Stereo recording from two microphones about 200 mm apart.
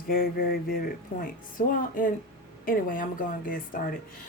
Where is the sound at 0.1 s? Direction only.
45° left (ahead or behind).